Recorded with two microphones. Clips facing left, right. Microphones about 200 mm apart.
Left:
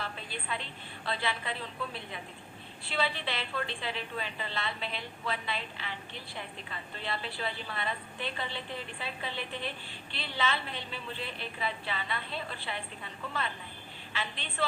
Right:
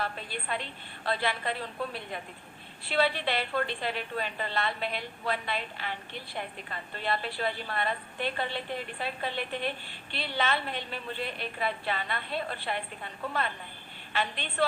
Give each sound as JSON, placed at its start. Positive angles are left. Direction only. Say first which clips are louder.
{"t": 0.0, "sound": "a woman's voice", "louder": "right 4 dB", "side_deg": -55}